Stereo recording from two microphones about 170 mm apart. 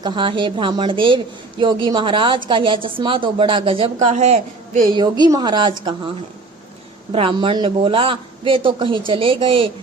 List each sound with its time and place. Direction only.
0.0 s a woman's voice: 30° right (ahead or behind)
4.0 s a man's voice: 45° right (ahead or behind)
4.9 s a woman's voice: 25° right (ahead or behind)
7.1 s a man's voice: 30° right (ahead or behind)